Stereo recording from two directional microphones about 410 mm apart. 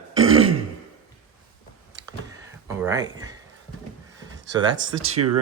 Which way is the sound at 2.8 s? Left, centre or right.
Centre.